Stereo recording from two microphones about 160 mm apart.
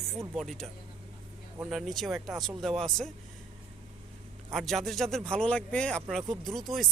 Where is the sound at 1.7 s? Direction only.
Centre (ahead or behind).